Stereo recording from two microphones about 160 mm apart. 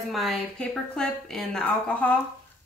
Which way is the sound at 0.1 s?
Centre (ahead or behind).